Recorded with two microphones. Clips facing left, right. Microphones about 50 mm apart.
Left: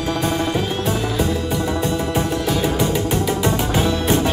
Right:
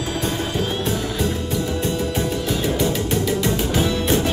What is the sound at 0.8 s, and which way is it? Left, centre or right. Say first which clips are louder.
Music: left 2 dB; centre.